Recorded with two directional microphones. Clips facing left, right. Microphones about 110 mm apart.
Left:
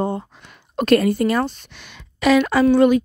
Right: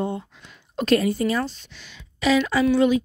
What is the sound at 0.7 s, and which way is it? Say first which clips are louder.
A woman's voice: left 4 dB; 55° left (ahead or behind).